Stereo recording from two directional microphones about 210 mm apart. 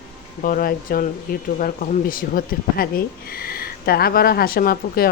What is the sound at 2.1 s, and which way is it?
Speech, 40° left (ahead or behind).